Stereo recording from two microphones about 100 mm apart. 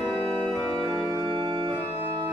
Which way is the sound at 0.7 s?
35° right (ahead or behind).